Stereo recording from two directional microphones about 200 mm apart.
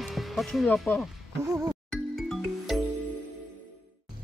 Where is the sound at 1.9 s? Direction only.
Centre (ahead or behind).